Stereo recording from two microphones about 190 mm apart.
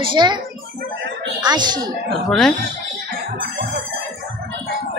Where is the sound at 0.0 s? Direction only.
25° right (ahead or behind).